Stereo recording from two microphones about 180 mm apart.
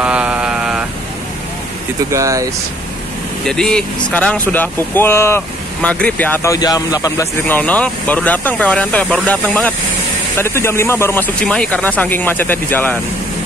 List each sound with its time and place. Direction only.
0.0 s vehicle: 5° right (ahead or behind)
2.0 s speech: 20° right (ahead or behind)
3.4 s speech: 5° left (ahead or behind)